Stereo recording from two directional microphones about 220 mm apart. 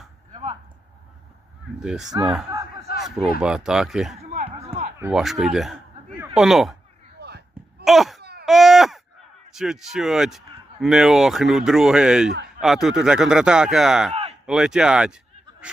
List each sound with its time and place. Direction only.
1.8 s speech: centre (ahead or behind)
4.2 s a sound: 30° right (ahead or behind)
4.9 s speech: 10° right (ahead or behind)
7.2 s basketball bounce: 50° right (ahead or behind)
7.9 s speech: centre (ahead or behind)
8.2 s baby cry: 45° right (ahead or behind)
8.4 s baby cry: centre (ahead or behind)
9.6 s speech: centre (ahead or behind)
14.1 s a sound: 30° right (ahead or behind)
14.4 s speech: 5° right (ahead or behind)